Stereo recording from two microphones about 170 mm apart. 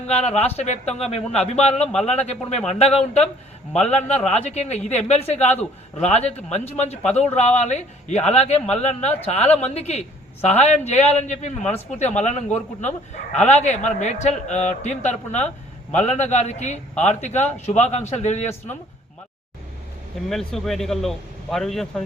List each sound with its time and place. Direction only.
0.1 s a man's voice: 35° left (ahead or behind)
6.9 s speech: 10° left (ahead or behind)
7.3 s a man's voice: 40° left (ahead or behind)
20.3 s a man's voice: centre (ahead or behind)